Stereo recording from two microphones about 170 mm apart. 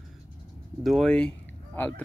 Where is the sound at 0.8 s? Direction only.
Centre (ahead or behind).